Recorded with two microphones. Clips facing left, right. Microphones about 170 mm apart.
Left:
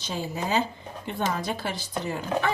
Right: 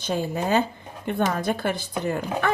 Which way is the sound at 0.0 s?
55° right (ahead or behind).